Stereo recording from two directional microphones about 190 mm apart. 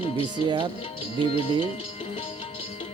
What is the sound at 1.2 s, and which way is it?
Speech, 30° left (ahead or behind).